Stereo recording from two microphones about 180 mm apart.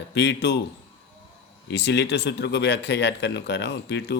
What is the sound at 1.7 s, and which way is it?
Speech, 75° left (ahead or behind).